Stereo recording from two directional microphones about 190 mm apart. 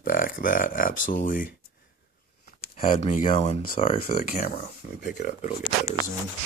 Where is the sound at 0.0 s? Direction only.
45° left (ahead or behind).